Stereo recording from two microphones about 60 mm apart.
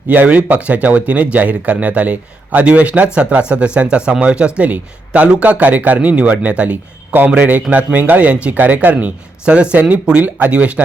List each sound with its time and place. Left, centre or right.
0.1 s speech: right